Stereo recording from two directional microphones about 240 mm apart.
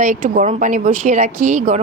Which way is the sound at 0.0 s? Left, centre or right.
Right.